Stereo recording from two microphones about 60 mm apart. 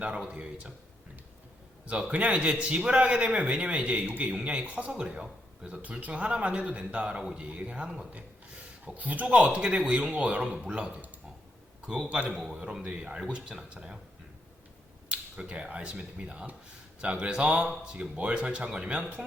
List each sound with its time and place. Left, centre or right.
0.0 s speech: right
1.9 s speech: centre
12.5 s speech: right
15.1 s speech: centre